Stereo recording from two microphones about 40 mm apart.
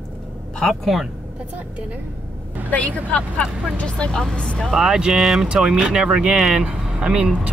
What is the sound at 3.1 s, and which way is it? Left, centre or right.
Speech, left.